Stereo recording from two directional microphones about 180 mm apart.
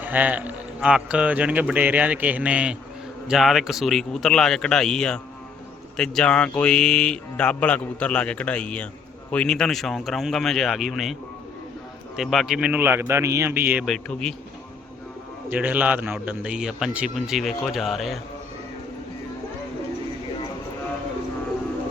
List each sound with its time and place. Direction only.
0.0 s a man's voice: 10° right (ahead or behind)
13.8 s a man's voice: 5° left (ahead or behind)
15.4 s a man's voice: 10° right (ahead or behind)